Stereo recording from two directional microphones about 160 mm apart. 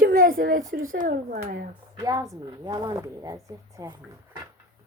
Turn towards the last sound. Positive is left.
turn(degrees=-25)  # may be behind; listen again after turning